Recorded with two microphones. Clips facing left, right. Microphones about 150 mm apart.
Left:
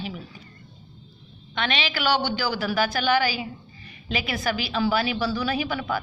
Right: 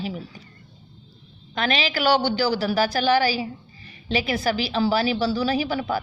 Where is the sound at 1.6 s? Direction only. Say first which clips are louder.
Right 3 dB; 40° right (ahead or behind).